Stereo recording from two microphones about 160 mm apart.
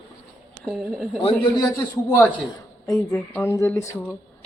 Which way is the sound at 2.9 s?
15° left (ahead or behind).